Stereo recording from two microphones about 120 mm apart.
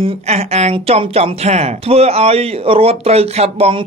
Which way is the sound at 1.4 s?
65° right (ahead or behind).